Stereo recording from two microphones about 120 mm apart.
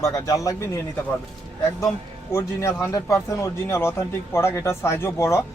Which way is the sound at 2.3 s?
25° left (ahead or behind).